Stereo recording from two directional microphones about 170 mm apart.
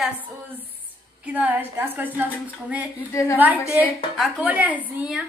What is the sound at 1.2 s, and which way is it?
A woman's voice, 10° right (ahead or behind).